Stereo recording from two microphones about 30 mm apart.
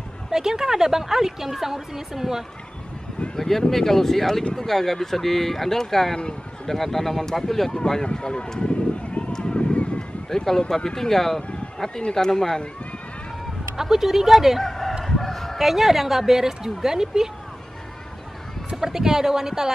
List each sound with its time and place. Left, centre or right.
0.3 s a woman's voice: centre
3.3 s speech: centre
6.1 s speech: left
6.7 s speech: centre
7.8 s speech: left
8.1 s speech: left
9.2 s a sound: left
10.3 s speech: centre
13.7 s a woman's voice: centre
14.6 s chicken: centre
15.5 s a woman's voice: centre
18.8 s a woman's voice: centre